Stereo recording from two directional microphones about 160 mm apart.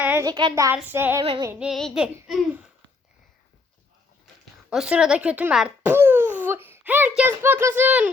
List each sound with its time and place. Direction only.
0.0 s a sound: 15° right (ahead or behind)
0.3 s speech: 30° right (ahead or behind)
0.5 s a child's voice: 15° right (ahead or behind)
1.5 s a sound: centre (ahead or behind)
4.7 s babbling: 5° right (ahead or behind)
7.2 s a child's voice: 10° right (ahead or behind)